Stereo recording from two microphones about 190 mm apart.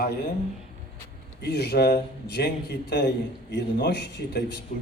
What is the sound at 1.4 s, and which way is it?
A man's voice, 60° left (ahead or behind).